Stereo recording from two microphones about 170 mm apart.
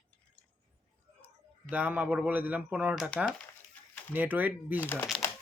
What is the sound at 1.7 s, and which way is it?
Speech, 10° right (ahead or behind).